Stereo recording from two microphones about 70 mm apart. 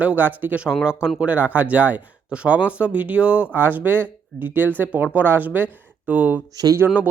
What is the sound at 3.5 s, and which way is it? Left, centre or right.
Speech, right.